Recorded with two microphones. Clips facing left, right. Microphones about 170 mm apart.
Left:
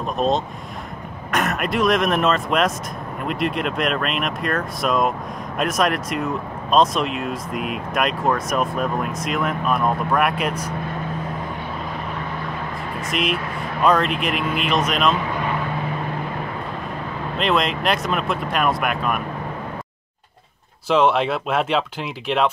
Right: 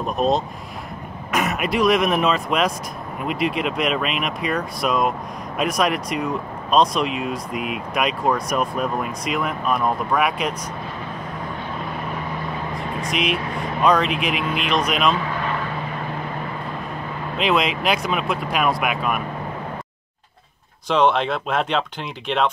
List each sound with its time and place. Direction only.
0.2 s speech: 5° right (ahead or behind)
13.1 s speech: centre (ahead or behind)
17.4 s speech: centre (ahead or behind)
20.9 s speech: 5° left (ahead or behind)